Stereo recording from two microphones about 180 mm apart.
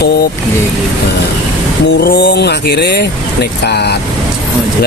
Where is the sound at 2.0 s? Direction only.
70° left (ahead or behind).